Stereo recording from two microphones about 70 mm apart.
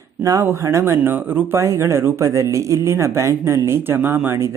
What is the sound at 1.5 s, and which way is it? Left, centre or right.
Speech, right.